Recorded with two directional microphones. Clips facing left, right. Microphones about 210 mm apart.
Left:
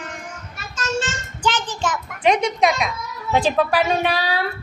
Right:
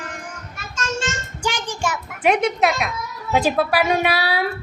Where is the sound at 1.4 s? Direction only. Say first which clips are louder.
Left 2 dB; 10° right (ahead or behind).